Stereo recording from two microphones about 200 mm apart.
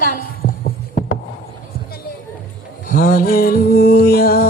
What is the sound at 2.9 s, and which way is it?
A woman's voice, 45° left (ahead or behind).